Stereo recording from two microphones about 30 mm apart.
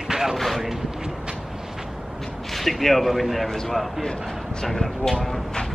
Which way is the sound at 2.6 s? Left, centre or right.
Centre.